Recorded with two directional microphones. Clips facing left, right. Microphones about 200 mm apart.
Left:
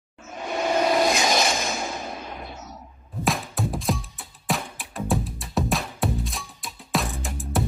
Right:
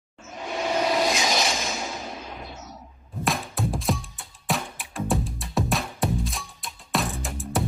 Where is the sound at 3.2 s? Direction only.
Centre (ahead or behind).